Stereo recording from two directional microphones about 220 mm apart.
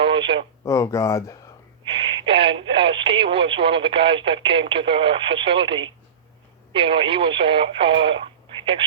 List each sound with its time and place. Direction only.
0.0 s a sound: 25° right (ahead or behind)
0.6 s speech: 15° left (ahead or behind)
1.8 s speech: 25° right (ahead or behind)